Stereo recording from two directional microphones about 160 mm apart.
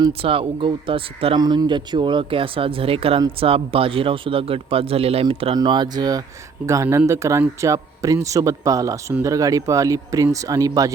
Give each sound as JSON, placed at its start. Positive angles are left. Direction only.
{"t": 0.0, "sound": "a man's voice", "side_deg": -35}